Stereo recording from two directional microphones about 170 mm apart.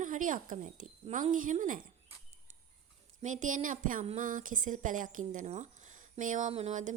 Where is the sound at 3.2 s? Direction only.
45° right (ahead or behind).